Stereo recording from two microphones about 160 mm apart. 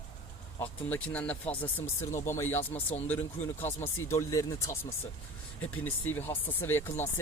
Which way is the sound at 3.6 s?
15° left (ahead or behind).